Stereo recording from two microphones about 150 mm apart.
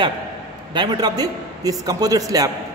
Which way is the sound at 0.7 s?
30° right (ahead or behind).